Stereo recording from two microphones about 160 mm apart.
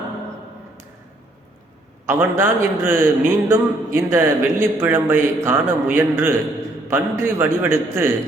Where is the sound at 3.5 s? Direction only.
15° right (ahead or behind).